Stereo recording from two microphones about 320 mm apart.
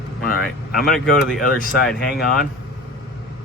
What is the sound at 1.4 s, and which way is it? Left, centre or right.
Speech, left.